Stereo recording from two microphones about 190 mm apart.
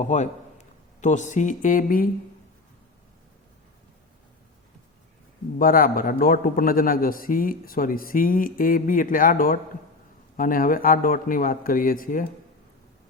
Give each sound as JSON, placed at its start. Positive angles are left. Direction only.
{"t": 0.0, "sound": "speech", "side_deg": 40}
{"t": 5.5, "sound": "a man's voice", "side_deg": 50}